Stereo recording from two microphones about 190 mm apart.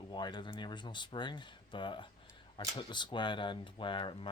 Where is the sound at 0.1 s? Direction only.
25° left (ahead or behind).